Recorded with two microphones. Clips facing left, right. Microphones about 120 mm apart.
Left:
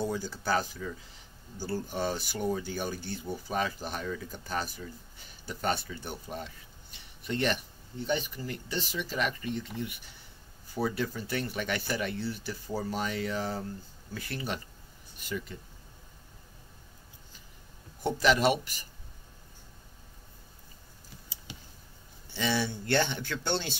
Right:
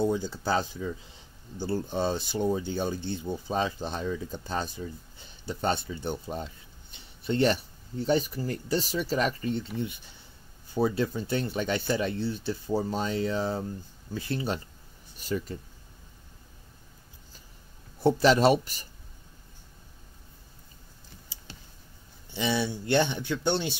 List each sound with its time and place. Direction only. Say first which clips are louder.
0.0 s speech: right 5 dB; 20° right (ahead or behind)
18.2 s speech: right 3 dB; 35° right (ahead or behind)
22.3 s speech: right 2 dB; 15° right (ahead or behind)